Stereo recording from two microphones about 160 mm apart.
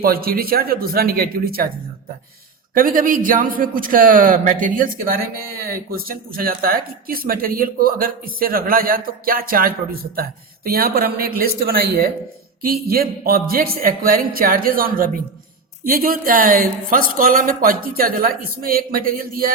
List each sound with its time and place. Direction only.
0.0 s speech: 70° right (ahead or behind)
2.7 s a man's voice: 60° right (ahead or behind)